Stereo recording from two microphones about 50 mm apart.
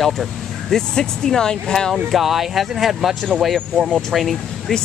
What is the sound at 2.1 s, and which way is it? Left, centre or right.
Speech, centre.